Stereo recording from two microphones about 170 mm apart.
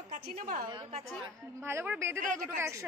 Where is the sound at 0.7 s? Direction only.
30° right (ahead or behind).